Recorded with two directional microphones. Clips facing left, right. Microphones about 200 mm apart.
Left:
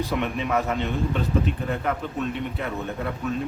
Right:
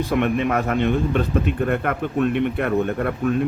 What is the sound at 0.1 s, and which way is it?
A man's voice, 60° right (ahead or behind).